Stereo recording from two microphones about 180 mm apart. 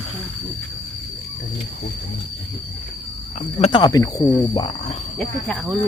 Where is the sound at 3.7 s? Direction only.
20° left (ahead or behind).